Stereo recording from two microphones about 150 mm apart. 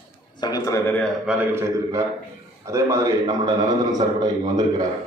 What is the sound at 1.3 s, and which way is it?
A man's voice, 15° right (ahead or behind).